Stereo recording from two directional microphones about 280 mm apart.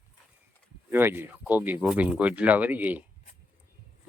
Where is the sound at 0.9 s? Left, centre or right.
Centre.